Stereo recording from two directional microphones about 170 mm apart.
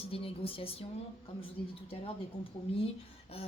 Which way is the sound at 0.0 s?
35° left (ahead or behind).